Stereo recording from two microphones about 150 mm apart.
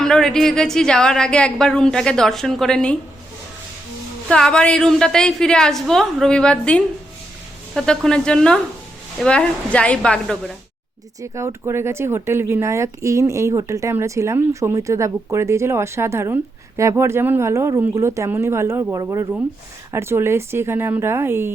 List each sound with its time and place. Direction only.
0.0 s speech: 5° left (ahead or behind)
4.3 s a woman's voice: 5° left (ahead or behind)
11.2 s speech: 20° right (ahead or behind)